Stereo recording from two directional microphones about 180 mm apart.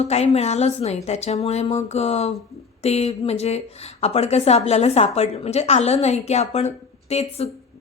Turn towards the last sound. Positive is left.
turn(degrees=35)  # may be behind; listen again after turning